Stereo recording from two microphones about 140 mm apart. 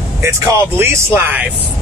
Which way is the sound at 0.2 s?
20° right (ahead or behind).